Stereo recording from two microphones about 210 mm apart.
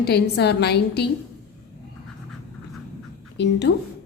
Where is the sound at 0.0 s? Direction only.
50° left (ahead or behind).